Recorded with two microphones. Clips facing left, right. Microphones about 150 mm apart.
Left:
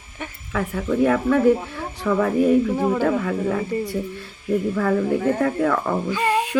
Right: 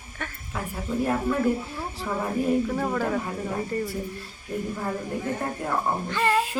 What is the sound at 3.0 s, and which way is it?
Speech, 85° left.